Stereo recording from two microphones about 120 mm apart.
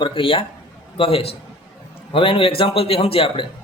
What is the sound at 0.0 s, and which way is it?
A man's voice, 45° left (ahead or behind).